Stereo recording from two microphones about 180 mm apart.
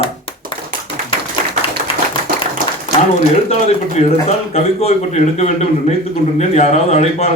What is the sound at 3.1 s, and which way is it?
Speech, 35° left (ahead or behind).